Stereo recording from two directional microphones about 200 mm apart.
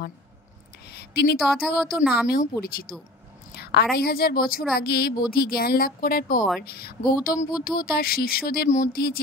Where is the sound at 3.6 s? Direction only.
55° left (ahead or behind).